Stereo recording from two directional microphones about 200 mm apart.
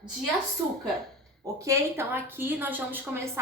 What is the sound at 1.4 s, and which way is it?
A woman's voice, 15° right (ahead or behind).